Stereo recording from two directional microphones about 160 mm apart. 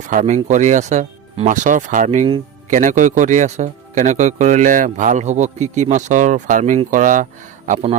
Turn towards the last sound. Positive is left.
turn(degrees=-45)  # may be behind; listen again after turning